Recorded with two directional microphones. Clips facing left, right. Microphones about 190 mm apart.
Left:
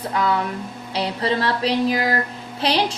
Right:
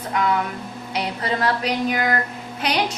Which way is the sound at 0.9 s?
30° left (ahead or behind).